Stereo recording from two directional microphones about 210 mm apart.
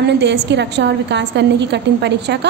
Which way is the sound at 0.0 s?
55° right (ahead or behind).